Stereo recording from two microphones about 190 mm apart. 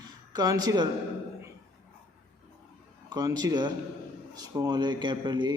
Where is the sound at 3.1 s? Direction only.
20° right (ahead or behind).